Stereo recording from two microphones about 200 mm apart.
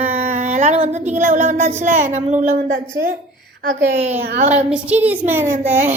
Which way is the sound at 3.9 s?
35° right (ahead or behind).